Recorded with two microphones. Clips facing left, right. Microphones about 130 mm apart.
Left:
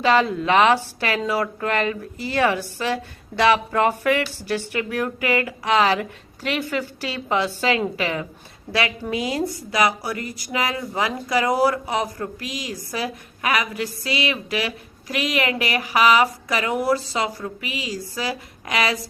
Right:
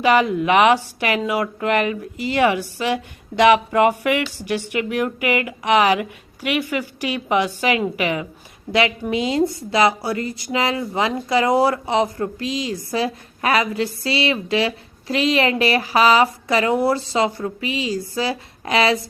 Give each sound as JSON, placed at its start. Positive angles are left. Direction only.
{"t": 0.0, "sound": "speech", "side_deg": -15}